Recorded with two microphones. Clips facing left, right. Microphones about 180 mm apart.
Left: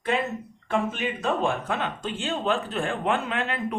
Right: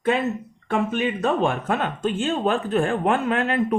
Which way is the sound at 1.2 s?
55° right (ahead or behind).